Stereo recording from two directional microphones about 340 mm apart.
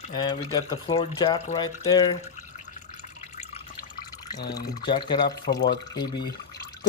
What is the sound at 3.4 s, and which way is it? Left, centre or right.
Drip, centre.